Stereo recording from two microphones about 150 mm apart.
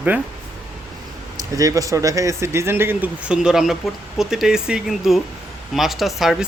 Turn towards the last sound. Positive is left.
turn(degrees=0)  # may be behind; listen again after turning